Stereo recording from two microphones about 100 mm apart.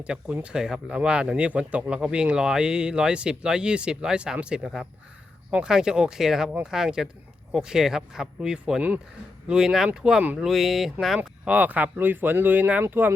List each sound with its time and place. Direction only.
0.0 s speech: 10° right (ahead or behind)
11.2 s speech: 15° right (ahead or behind)